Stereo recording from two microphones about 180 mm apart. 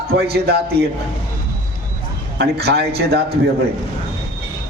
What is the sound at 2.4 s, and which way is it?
Speech, 65° right (ahead or behind).